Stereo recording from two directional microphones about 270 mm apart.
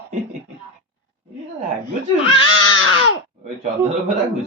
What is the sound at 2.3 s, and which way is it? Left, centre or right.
Baby cry, centre.